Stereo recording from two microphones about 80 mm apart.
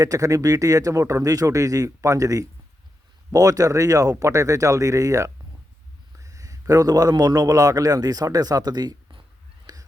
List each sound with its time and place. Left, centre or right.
0.0 s a man's voice: right
9.7 s whispering: right